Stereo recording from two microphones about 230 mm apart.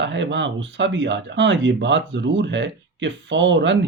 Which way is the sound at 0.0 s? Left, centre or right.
Right.